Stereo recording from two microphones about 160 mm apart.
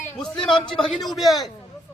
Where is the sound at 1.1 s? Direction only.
Centre (ahead or behind).